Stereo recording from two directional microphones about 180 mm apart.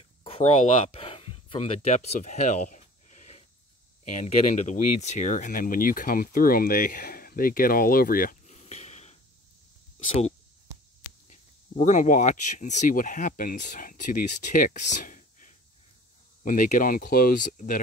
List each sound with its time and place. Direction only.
0.2 s speech: 35° left (ahead or behind)
11.2 s speech: 45° left (ahead or behind)